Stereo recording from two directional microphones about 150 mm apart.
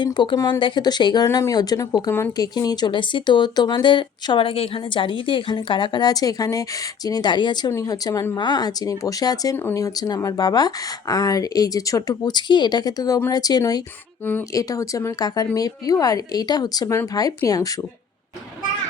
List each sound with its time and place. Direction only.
0.0 s speech: 30° left (ahead or behind)